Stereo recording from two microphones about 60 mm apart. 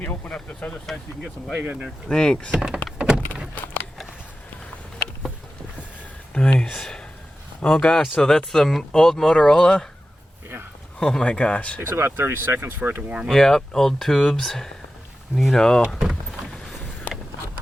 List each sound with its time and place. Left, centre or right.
0.3 s speech: centre
1.5 s speech: right
2.0 s speech: centre
2.5 s speech: centre
3.0 s power windows: centre
3.6 s a sound: left
6.3 s speech: centre
6.7 s speech: centre
11.0 s speech: centre
11.8 s speech: right
13.2 s speech: centre